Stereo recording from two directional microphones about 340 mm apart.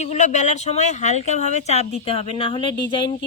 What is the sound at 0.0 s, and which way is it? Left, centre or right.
Speech, centre.